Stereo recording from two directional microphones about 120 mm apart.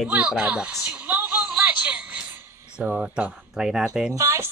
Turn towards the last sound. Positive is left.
turn(degrees=-25)  # may be behind; listen again after turning